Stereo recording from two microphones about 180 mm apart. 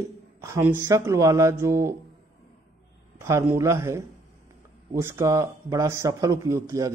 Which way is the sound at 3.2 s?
15° right (ahead or behind).